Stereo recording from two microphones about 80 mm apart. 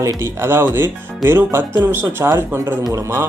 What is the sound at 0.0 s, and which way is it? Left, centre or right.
Speech, right.